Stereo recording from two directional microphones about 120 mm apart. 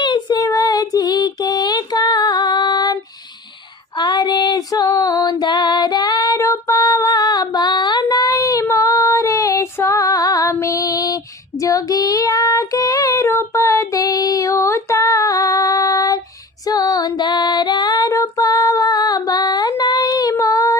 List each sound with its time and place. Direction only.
0.0 s child singing: 35° left (ahead or behind)
3.9 s female singing: 35° left (ahead or behind)